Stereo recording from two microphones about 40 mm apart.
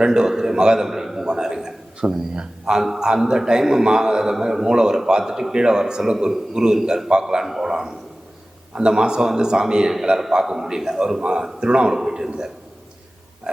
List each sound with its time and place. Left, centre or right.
0.0 s a man's voice: centre
1.3 s a sound: centre
2.8 s a man's voice: centre
7.4 s a man's voice: centre